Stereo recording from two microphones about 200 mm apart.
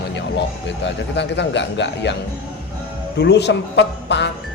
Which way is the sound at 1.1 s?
60° left (ahead or behind).